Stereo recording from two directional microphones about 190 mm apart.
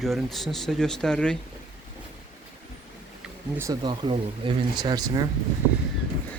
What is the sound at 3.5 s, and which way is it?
Speech, 20° right (ahead or behind).